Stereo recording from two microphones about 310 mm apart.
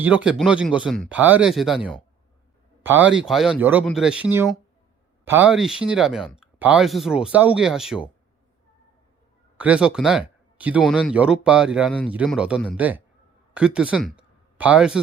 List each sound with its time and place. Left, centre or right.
0.0 s speech: centre
3.2 s speech: centre
9.6 s speech: centre